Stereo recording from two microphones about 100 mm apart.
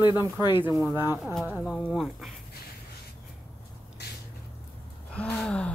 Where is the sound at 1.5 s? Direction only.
10° right (ahead or behind).